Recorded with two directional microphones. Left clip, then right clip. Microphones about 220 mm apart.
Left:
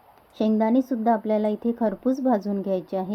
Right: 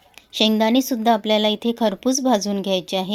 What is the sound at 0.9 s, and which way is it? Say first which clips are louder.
Speech: right 4 dB; 35° right (ahead or behind).